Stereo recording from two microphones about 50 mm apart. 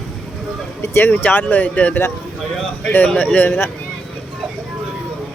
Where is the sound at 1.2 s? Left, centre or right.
Left.